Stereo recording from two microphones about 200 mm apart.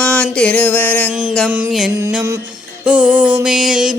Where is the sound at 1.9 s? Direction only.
15° right (ahead or behind).